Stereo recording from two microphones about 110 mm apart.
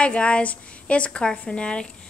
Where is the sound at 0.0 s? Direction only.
10° left (ahead or behind).